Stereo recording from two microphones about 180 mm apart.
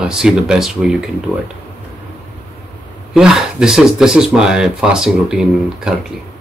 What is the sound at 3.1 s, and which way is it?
Speech, 5° right (ahead or behind).